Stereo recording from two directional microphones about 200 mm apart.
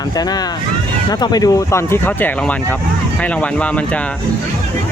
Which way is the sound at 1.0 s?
20° left (ahead or behind).